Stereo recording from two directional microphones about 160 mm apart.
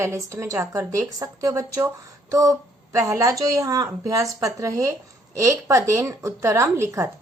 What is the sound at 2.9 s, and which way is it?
A woman's voice, 20° right (ahead or behind).